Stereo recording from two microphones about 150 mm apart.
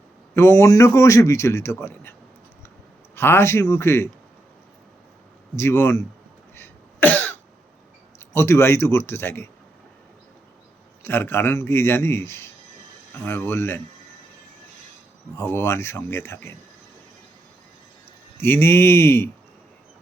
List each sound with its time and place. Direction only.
0.3 s a man's voice: 20° left (ahead or behind)
3.2 s a man's voice: 15° left (ahead or behind)
5.5 s a man's voice: 15° left (ahead or behind)
6.6 s cough: 15° left (ahead or behind)
8.3 s a man's voice: 15° left (ahead or behind)
11.0 s a man's voice: 15° left (ahead or behind)
15.5 s a man's voice: 15° left (ahead or behind)
18.3 s a man's voice: 15° left (ahead or behind)